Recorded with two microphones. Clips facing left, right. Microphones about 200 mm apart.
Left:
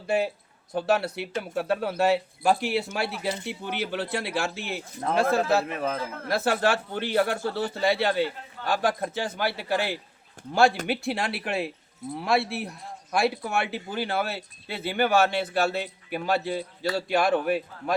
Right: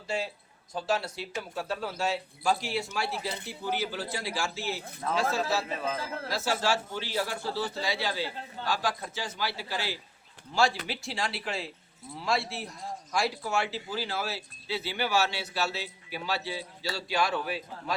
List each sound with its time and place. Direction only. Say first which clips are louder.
0.1 s a man's voice: left 8 dB; 60° left (ahead or behind)